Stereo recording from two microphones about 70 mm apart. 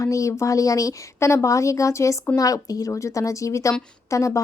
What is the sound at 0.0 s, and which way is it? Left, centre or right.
Speech, left.